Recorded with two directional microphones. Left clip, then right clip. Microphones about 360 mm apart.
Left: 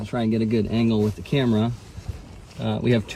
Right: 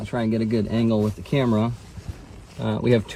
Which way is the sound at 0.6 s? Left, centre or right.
Centre.